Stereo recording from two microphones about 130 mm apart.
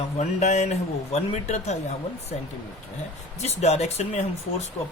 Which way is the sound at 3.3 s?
55° left (ahead or behind).